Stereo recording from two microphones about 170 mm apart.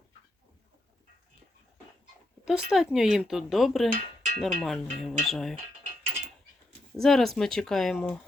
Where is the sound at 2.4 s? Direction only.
5° right (ahead or behind).